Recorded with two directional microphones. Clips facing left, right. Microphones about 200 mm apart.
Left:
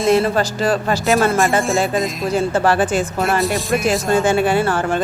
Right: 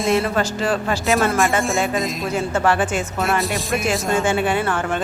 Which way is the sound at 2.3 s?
35° left (ahead or behind).